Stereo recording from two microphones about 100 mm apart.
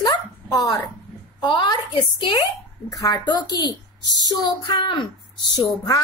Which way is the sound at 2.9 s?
35° left (ahead or behind).